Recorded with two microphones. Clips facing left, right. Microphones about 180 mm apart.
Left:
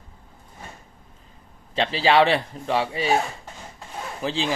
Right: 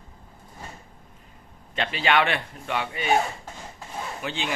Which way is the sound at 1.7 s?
30° left (ahead or behind).